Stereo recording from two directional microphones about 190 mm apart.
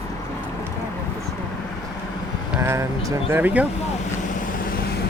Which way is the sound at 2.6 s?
15° right (ahead or behind).